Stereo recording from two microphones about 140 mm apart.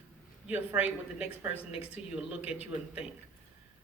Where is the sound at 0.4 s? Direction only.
10° right (ahead or behind).